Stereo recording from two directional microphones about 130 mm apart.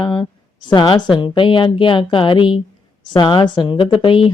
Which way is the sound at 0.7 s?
35° left (ahead or behind).